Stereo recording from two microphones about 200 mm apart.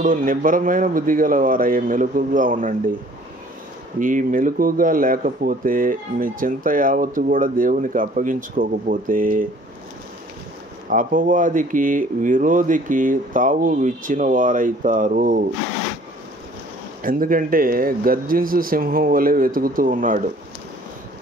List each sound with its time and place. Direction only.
0.0 s speech: 45° right (ahead or behind)
4.0 s speech: 40° right (ahead or behind)
10.9 s speech: 40° right (ahead or behind)
17.0 s speech: 45° right (ahead or behind)